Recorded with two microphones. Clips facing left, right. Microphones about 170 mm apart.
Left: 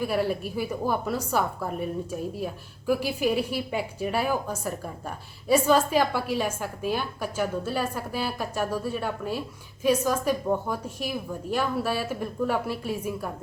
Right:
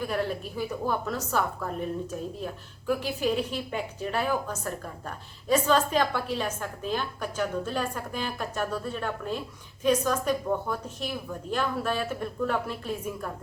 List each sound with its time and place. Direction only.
0.0 s a woman's voice: 10° left (ahead or behind)